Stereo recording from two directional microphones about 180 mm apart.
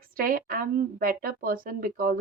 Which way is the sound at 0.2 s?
50° right (ahead or behind).